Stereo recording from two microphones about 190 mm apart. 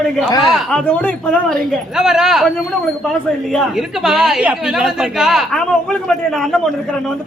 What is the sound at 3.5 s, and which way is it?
Speech, centre (ahead or behind).